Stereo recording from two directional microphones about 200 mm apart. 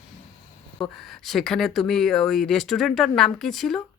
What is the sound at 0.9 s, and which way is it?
Speech, centre (ahead or behind).